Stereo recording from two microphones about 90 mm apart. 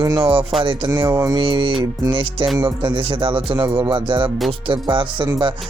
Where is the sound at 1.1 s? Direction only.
40° right (ahead or behind).